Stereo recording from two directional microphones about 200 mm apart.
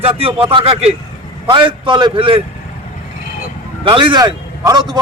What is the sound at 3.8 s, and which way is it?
A man's voice, 25° right (ahead or behind).